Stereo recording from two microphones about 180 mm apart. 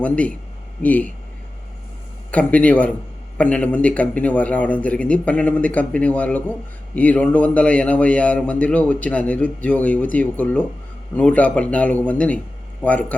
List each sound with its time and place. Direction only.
0.0 s a man's voice: 10° left (ahead or behind)
2.3 s a man's voice: 5° left (ahead or behind)